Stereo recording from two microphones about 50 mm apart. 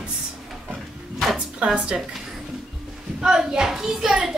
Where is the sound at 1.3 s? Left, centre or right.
Right.